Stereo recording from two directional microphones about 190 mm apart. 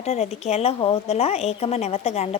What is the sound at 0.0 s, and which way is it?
A woman's voice, 35° left (ahead or behind).